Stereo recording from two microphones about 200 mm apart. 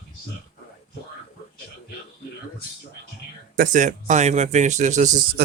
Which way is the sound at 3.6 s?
40° right (ahead or behind).